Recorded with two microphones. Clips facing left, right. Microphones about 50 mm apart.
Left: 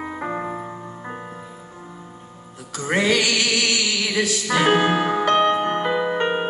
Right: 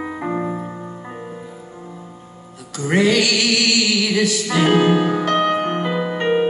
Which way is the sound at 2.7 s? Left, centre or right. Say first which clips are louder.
Right 3 dB; left.